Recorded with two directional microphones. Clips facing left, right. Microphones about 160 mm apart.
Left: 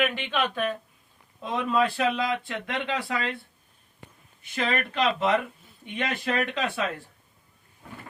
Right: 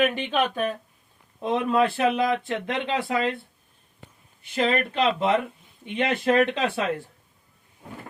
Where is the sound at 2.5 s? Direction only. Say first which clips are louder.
Right 4 dB; 25° right (ahead or behind).